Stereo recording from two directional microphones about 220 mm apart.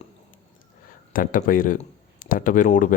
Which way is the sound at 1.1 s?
40° left (ahead or behind).